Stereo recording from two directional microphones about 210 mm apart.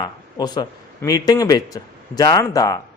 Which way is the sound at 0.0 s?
20° left (ahead or behind).